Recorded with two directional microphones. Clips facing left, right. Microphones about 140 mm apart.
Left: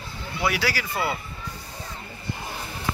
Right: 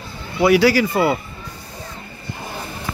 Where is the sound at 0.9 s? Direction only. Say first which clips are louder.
Right 9 dB; 75° right (ahead or behind).